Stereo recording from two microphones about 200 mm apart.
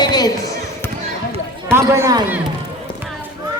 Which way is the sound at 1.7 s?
15° right (ahead or behind).